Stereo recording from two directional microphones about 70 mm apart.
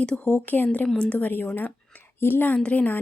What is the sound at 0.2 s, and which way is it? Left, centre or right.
A woman's voice, left.